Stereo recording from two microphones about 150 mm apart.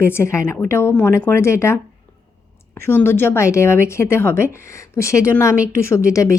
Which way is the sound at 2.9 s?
15° left (ahead or behind).